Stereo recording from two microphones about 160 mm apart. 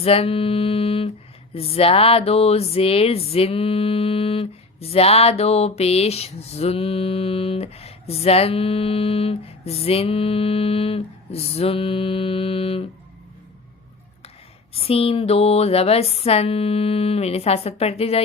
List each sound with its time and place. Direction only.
0.0 s speech: 35° left (ahead or behind)
14.7 s speech: 40° left (ahead or behind)